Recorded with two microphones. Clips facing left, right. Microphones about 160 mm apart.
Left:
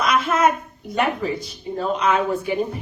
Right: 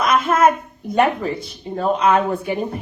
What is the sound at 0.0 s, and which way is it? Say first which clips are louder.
A woman's voice: right 3 dB; 50° right (ahead or behind).